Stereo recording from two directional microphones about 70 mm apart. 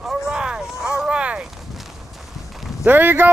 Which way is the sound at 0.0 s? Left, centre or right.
Centre.